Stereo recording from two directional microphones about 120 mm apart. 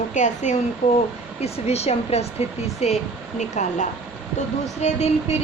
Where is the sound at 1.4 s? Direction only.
60° left (ahead or behind).